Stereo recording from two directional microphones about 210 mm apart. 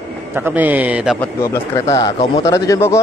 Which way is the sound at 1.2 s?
10° left (ahead or behind).